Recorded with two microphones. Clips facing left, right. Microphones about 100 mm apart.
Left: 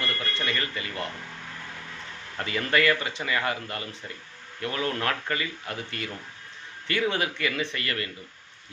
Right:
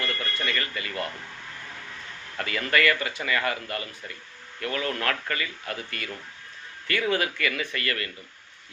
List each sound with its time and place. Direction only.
0.0 s speech: 25° left (ahead or behind)
2.4 s speech: 25° left (ahead or behind)